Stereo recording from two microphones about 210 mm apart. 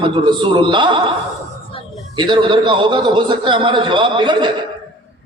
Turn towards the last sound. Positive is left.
turn(degrees=-20)  # may be behind; listen again after turning